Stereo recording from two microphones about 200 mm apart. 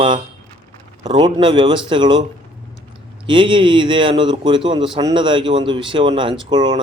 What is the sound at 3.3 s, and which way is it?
Speech, 25° right (ahead or behind).